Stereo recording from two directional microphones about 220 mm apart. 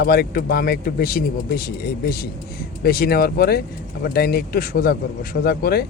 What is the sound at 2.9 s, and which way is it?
Speech, 45° left (ahead or behind).